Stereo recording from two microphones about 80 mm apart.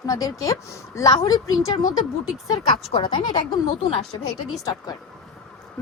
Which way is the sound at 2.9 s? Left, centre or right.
Left.